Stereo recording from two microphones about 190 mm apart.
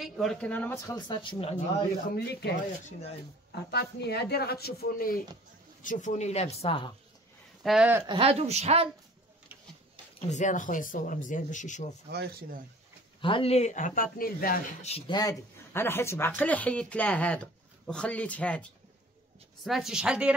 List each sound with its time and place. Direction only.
0.0 s speech: centre (ahead or behind); by 1.6 s 25° left (ahead or behind)
2.1 s speech: 60° left (ahead or behind)
3.7 s speech: 60° left (ahead or behind); by 6.9 s 30° left (ahead or behind)
7.6 s a woman's voice: 5° right (ahead or behind)
8.1 s speech: 30° right (ahead or behind)
10.3 s speech: 40° left (ahead or behind)
12.1 s speech: 55° right (ahead or behind)
13.2 s speech: 30° left (ahead or behind); by 14.6 s 50° left (ahead or behind)
14.8 s a woman's voice: 30° left (ahead or behind); by 20.3 s 5° right (ahead or behind)